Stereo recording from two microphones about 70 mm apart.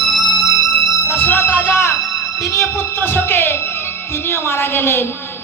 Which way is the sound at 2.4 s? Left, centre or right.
Left.